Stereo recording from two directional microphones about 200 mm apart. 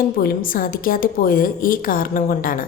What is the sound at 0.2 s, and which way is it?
A woman's voice, 45° left (ahead or behind).